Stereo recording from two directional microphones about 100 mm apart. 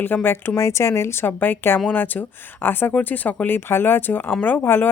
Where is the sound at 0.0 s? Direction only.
20° left (ahead or behind).